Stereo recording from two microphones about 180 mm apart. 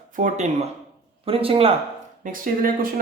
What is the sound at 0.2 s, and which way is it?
A man's voice, 40° right (ahead or behind).